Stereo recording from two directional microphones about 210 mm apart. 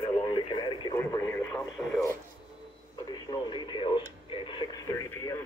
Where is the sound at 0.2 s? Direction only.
20° left (ahead or behind).